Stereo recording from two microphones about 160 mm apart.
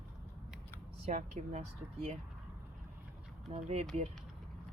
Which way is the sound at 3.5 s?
40° right (ahead or behind).